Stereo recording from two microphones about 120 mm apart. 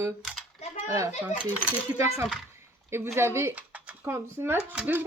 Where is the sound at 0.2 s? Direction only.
Centre (ahead or behind).